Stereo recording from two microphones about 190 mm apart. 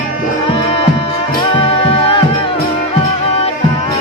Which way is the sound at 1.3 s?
25° left (ahead or behind).